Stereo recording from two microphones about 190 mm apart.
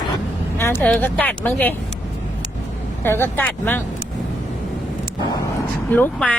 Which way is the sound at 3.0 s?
10° left (ahead or behind).